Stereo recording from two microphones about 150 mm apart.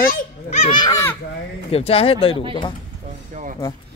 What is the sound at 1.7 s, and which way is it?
Speech, 40° left (ahead or behind).